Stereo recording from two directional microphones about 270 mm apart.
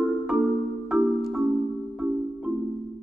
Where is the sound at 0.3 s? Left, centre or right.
Centre.